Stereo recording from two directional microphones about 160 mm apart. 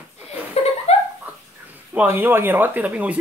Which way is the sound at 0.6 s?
40° left (ahead or behind).